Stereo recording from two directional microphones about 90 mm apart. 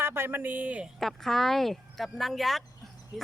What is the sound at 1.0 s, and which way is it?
Speech, centre (ahead or behind).